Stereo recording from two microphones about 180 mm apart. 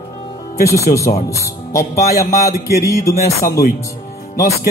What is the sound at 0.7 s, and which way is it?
Speech, 15° left (ahead or behind).